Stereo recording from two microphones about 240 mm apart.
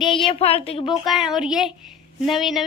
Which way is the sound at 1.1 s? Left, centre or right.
Centre.